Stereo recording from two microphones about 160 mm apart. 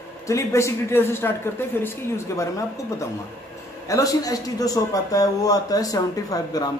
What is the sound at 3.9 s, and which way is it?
A man's voice, 20° left (ahead or behind).